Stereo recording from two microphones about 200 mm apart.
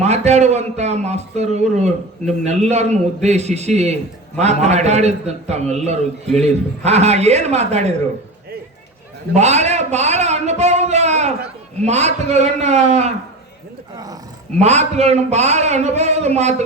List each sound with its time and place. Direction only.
0.0 s a man's voice: 35° right (ahead or behind)
9.3 s a man's voice: 35° right (ahead or behind)
13.9 s speech: 20° right (ahead or behind)
14.6 s a man's voice: 35° right (ahead or behind)